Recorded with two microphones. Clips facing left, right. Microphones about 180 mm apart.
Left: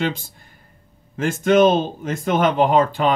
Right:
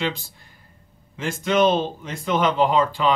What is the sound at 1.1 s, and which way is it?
Speech, 50° left (ahead or behind).